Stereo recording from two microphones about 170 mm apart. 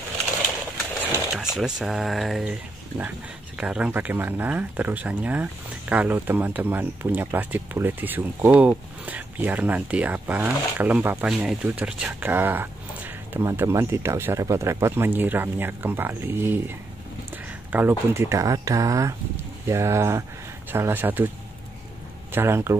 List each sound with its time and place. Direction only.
1.3 s speech: 5° right (ahead or behind)
3.5 s speech: 5° right (ahead or behind)
22.3 s speech: 15° right (ahead or behind)